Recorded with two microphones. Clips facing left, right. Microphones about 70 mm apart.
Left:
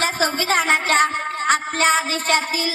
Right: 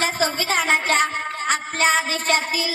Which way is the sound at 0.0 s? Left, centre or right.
Left.